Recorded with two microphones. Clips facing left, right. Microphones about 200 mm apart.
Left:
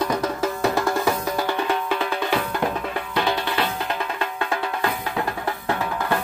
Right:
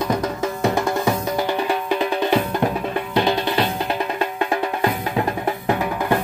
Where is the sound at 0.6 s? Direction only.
20° right (ahead or behind).